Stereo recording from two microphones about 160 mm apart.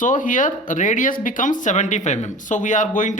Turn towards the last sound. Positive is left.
turn(degrees=50)  # may be behind; listen again after turning